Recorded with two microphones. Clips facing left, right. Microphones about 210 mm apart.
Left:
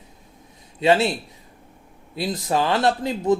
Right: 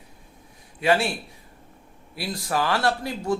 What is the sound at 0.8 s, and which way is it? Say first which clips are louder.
Speech: left 4 dB; 20° left (ahead or behind).